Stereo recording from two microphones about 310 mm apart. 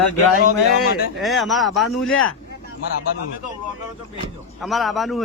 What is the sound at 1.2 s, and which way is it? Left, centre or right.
Speech, centre.